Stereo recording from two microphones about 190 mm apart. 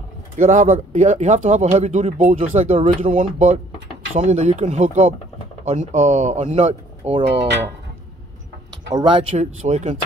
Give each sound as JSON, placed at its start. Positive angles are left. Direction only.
{"t": 0.4, "sound": "speech", "side_deg": -40}
{"t": 7.2, "sound": "speech", "side_deg": -65}
{"t": 8.9, "sound": "speech", "side_deg": -25}
{"t": 9.3, "sound": "speech", "side_deg": -40}